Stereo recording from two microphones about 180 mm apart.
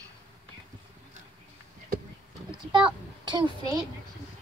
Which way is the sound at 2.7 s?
25° right (ahead or behind).